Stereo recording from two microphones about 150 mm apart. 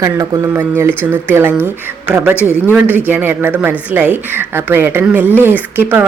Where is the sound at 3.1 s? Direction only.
15° right (ahead or behind).